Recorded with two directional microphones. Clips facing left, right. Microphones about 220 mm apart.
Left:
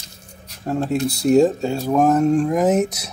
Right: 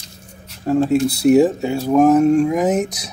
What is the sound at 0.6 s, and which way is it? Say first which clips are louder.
Speech: right 5 dB; centre (ahead or behind).